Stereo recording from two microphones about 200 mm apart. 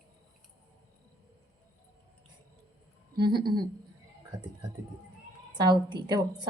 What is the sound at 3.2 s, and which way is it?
Speech, 20° right (ahead or behind).